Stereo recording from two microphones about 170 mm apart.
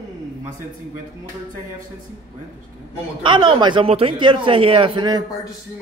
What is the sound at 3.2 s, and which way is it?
Speech, 30° right (ahead or behind).